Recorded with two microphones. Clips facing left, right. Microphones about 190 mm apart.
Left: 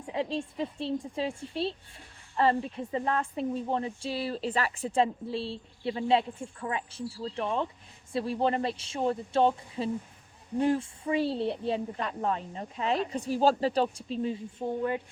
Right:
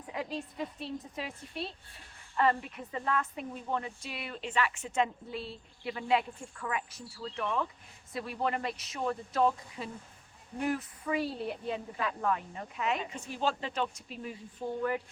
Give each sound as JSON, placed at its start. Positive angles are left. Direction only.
{"t": 0.0, "sound": "speech", "side_deg": 30}